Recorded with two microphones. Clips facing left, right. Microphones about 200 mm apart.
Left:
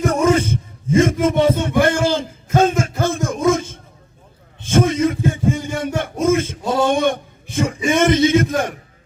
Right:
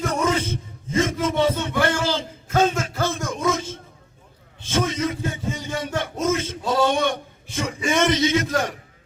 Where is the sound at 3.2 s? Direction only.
50° left (ahead or behind).